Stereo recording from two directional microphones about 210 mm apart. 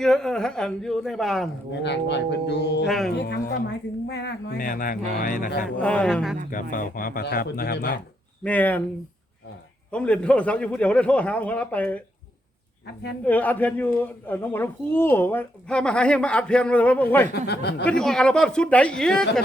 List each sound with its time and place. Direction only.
0.0 s a man's voice: centre (ahead or behind)
1.7 s speech: 55° left (ahead or behind)
2.8 s a man's voice: centre (ahead or behind)
3.2 s speech: 50° left (ahead or behind)
5.6 s a man's voice: 5° left (ahead or behind)
6.5 s speech: 40° left (ahead or behind)
8.4 s a woman's voice: 10° left (ahead or behind)
9.9 s a man's voice: 5° left (ahead or behind)
13.2 s a woman's voice: 10° left (ahead or behind)
17.4 s speech: 50° left (ahead or behind)
17.8 s a man's voice: 5° left (ahead or behind)